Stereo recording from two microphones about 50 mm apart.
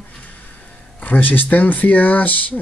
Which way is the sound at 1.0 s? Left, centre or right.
Left.